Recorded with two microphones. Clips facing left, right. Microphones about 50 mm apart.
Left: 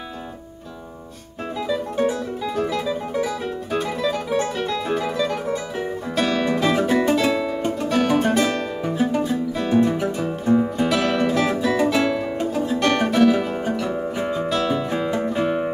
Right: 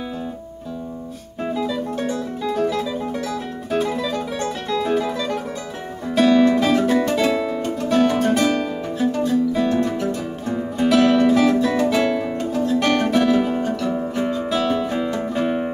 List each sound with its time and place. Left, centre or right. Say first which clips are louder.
1.5 s music: right 1 dB; centre
8.8 s music: left 3 dB; centre
11.4 s guitar: right 2 dB; centre
12.0 s music: right 1 dB; centre
12.4 s music: right 1 dB; centre
12.9 s music: left 2 dB; centre
13.6 s music: right 2 dB; centre